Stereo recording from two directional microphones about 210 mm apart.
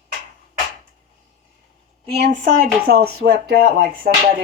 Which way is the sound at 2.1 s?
50° right (ahead or behind).